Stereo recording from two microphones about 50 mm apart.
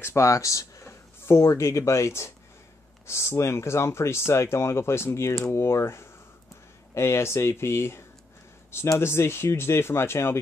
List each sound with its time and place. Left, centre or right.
0.0 s speech: left